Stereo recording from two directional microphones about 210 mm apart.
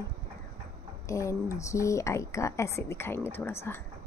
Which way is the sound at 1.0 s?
15° left (ahead or behind).